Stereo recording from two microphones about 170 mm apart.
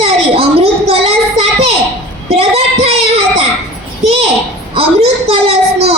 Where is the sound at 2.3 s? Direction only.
35° right (ahead or behind).